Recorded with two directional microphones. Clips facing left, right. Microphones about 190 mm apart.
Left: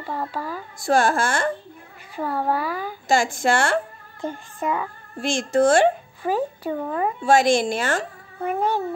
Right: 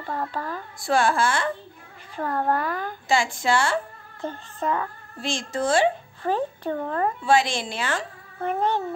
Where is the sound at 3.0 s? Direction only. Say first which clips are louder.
Left 3 dB; 45° left (ahead or behind).